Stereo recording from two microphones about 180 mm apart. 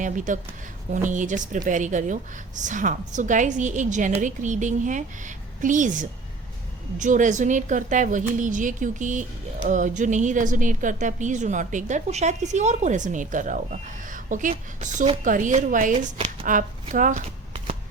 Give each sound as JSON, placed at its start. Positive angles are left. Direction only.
{"t": 0.0, "sound": "a woman's voice", "side_deg": -45}